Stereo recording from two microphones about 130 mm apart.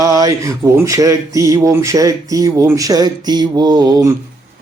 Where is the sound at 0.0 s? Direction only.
25° right (ahead or behind).